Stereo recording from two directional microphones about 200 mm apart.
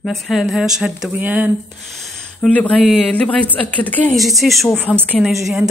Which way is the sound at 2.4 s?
5° left (ahead or behind).